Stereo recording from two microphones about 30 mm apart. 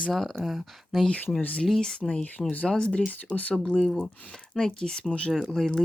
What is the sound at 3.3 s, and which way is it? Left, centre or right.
Speech, left.